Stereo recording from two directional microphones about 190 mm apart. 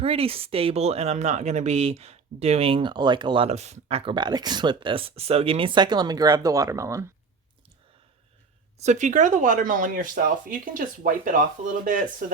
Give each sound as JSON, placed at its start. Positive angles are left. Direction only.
{"t": 0.0, "sound": "speech", "side_deg": -30}
{"t": 8.8, "sound": "speech", "side_deg": -40}